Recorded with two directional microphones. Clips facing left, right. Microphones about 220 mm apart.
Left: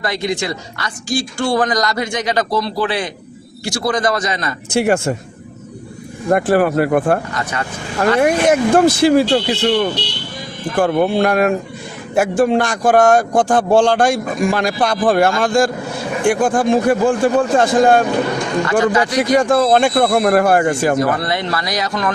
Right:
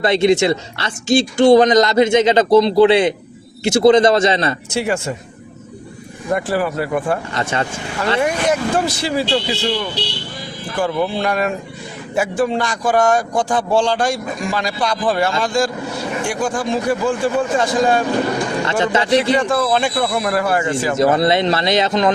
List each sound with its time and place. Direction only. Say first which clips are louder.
0.0 s speech: right 7 dB; 25° right (ahead or behind)
4.7 s speech: left 9 dB; 50° left (ahead or behind)
6.3 s speech: left 5 dB; 55° left (ahead or behind)
7.3 s speech: right 2 dB; 25° right (ahead or behind)
7.9 s speech: left 5 dB; 50° left (ahead or behind)
18.6 s speech: left 5 dB; 25° right (ahead or behind)
19.4 s speech: left 4 dB; 45° left (ahead or behind)
21.0 s speech: right 4 dB; 25° right (ahead or behind)